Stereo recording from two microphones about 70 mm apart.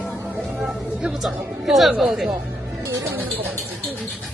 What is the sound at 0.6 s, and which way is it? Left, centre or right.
Speech, centre.